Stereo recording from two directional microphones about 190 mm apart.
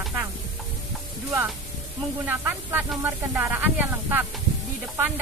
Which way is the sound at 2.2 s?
10° right (ahead or behind).